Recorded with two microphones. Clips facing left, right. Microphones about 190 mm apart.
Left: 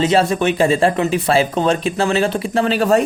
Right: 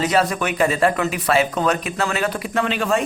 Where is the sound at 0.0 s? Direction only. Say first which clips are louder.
Left 4 dB; 25° left (ahead or behind).